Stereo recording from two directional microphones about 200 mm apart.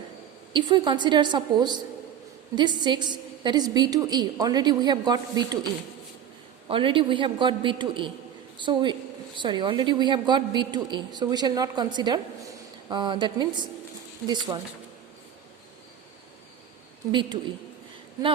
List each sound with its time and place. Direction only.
0.5 s a woman's voice: 25° right (ahead or behind)
6.7 s a woman's voice: 25° right (ahead or behind)
17.1 s a woman's voice: 25° right (ahead or behind)